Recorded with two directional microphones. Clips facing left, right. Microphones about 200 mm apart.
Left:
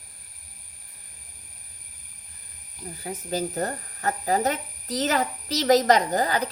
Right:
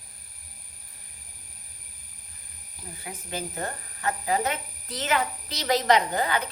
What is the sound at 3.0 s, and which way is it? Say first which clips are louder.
Speech: left 7 dB; 40° left (ahead or behind).